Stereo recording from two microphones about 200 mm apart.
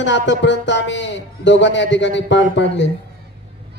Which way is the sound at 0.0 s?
65° left (ahead or behind).